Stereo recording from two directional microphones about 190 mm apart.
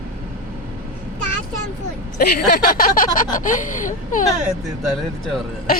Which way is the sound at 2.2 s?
50° left (ahead or behind).